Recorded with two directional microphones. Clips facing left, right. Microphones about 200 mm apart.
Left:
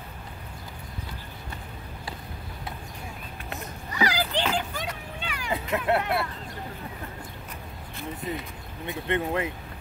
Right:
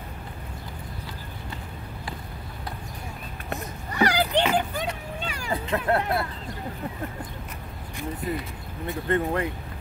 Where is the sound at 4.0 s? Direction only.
60° right (ahead or behind).